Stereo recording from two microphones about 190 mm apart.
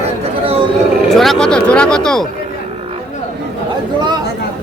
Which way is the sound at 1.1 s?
Centre (ahead or behind).